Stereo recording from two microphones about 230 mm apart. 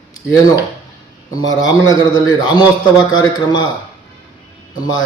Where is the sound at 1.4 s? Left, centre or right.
Centre.